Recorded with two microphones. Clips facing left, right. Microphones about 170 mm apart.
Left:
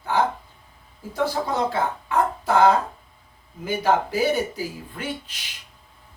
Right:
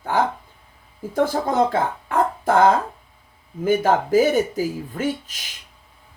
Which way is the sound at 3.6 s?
50° right (ahead or behind).